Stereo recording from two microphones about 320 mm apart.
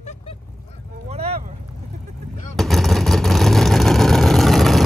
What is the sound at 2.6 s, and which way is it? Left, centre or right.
Vehicle, centre.